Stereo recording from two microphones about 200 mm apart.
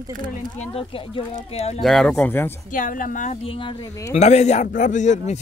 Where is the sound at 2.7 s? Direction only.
40° left (ahead or behind).